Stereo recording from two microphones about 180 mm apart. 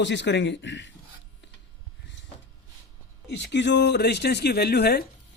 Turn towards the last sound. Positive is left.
turn(degrees=65)  # may be behind; listen again after turning